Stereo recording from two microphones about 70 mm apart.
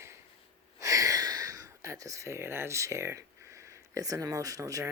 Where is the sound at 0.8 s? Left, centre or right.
Right.